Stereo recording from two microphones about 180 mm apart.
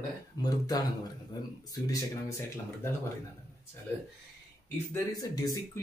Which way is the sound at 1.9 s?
15° left (ahead or behind).